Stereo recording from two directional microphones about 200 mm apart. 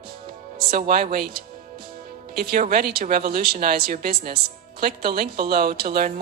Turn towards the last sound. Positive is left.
turn(degrees=-45)  # may be behind; listen again after turning